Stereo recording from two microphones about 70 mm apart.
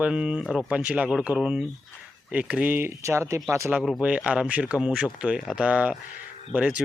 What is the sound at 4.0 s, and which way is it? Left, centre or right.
Speech, centre.